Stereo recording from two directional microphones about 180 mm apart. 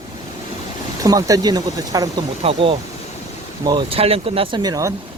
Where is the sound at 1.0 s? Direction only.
20° right (ahead or behind).